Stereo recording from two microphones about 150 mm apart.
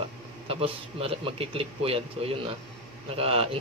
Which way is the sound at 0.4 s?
40° right (ahead or behind).